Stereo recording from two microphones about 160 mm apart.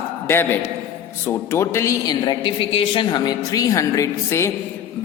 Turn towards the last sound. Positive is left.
turn(degrees=15)  # may be behind; listen again after turning